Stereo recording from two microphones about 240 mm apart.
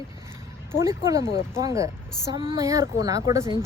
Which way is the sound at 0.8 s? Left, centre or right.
Centre.